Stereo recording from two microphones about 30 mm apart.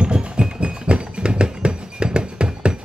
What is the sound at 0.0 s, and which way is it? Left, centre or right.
Music, right.